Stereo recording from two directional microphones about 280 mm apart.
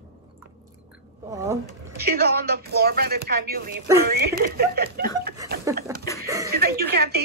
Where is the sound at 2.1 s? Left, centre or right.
Right.